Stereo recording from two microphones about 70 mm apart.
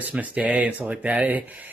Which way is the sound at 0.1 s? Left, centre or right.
Right.